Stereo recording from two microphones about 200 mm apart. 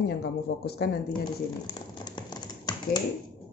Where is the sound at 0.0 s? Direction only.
55° left (ahead or behind).